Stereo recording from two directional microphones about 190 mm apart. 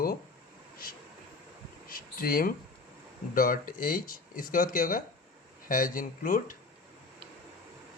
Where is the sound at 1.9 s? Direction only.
50° left (ahead or behind).